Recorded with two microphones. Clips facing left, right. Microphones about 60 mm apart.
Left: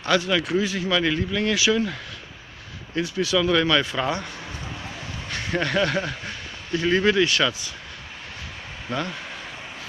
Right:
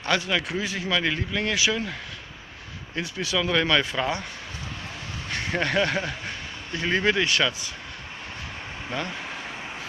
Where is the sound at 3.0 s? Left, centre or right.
Right.